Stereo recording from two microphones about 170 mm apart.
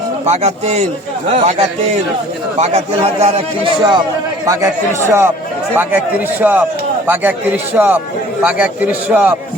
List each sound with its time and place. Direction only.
0.3 s a man's voice: 40° right (ahead or behind)
4.4 s a man's voice: 15° right (ahead or behind)
6.4 s a man's voice: 10° right (ahead or behind)